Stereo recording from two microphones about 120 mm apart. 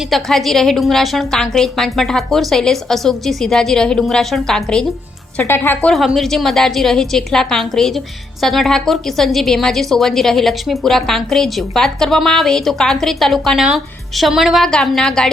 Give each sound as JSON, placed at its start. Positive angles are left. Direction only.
{"t": 0.1, "sound": "a woman's voice", "side_deg": 0}
{"t": 5.4, "sound": "speech", "side_deg": 20}
{"t": 6.1, "sound": "a woman's voice", "side_deg": 5}